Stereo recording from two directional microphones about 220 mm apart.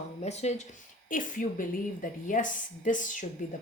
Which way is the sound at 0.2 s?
30° left (ahead or behind).